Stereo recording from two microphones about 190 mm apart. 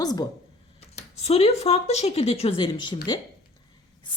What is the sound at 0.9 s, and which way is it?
Speech, 35° left (ahead or behind).